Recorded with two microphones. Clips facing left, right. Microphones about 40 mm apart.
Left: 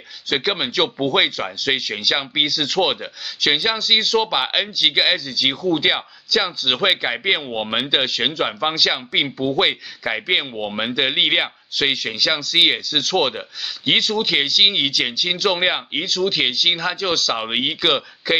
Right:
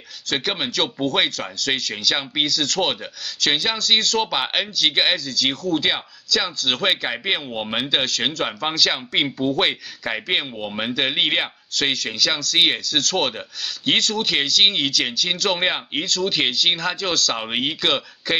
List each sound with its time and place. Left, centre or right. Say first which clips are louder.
0.3 s speech: left 3 dB; centre